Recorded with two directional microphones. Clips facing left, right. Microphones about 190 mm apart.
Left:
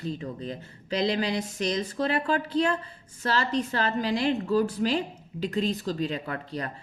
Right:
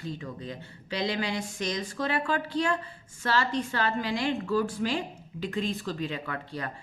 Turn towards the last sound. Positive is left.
turn(degrees=35)  # may be behind; listen again after turning